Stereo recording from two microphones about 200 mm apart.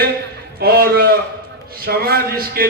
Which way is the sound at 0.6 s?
50° right (ahead or behind).